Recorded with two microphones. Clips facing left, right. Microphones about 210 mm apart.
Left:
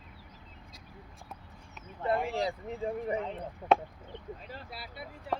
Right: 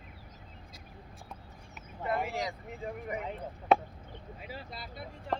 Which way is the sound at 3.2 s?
Centre (ahead or behind).